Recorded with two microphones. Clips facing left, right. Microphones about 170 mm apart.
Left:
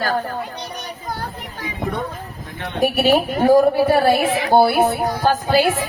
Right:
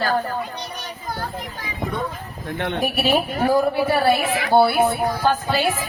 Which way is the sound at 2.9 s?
45° left (ahead or behind).